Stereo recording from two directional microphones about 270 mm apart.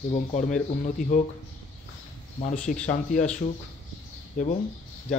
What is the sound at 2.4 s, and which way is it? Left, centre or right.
Speech, left.